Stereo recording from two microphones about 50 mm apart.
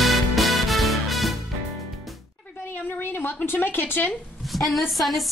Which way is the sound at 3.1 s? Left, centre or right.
Left.